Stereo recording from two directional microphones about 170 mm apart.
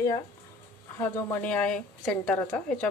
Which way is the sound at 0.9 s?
15° left (ahead or behind).